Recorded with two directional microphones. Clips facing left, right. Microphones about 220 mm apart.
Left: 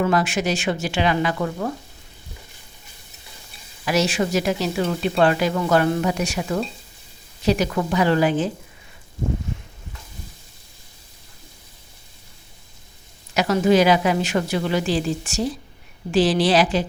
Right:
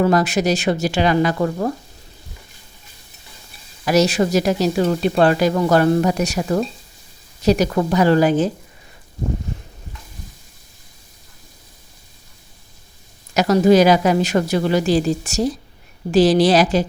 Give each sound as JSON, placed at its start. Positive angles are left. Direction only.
{"t": 0.0, "sound": "speech", "side_deg": -40}
{"t": 3.8, "sound": "speech", "side_deg": -40}
{"t": 9.5, "sound": "a sound", "side_deg": -35}
{"t": 13.3, "sound": "speech", "side_deg": -40}